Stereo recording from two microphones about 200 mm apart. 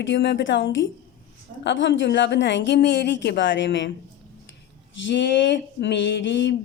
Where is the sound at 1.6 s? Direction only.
65° left (ahead or behind).